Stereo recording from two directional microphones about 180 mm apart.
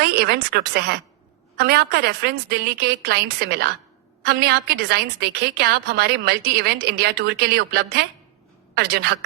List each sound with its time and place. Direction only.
0.0 s a woman's voice: 60° right (ahead or behind)